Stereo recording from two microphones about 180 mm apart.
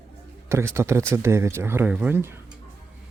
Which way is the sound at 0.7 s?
15° right (ahead or behind).